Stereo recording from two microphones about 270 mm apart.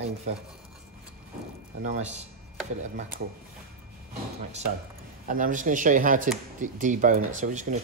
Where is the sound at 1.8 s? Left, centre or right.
Right.